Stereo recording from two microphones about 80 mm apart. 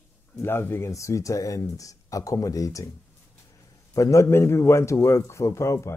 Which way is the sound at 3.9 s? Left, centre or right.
Left.